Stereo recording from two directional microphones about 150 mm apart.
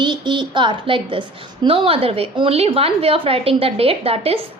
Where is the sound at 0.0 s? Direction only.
30° right (ahead or behind).